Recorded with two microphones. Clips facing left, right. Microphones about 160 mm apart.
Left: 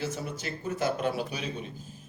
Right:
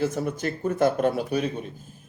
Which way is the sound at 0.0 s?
55° right (ahead or behind).